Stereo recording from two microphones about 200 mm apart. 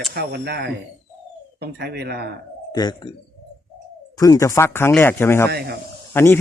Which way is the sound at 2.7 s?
20° left (ahead or behind).